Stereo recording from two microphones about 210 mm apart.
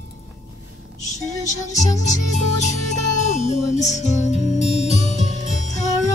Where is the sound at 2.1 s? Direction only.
35° left (ahead or behind).